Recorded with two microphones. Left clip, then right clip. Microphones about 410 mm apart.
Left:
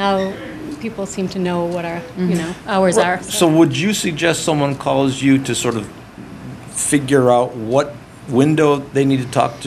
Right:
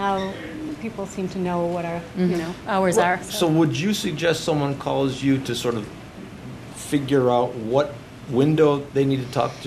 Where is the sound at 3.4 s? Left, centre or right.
Left.